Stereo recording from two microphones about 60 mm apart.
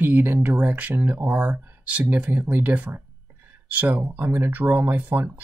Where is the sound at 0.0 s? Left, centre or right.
Right.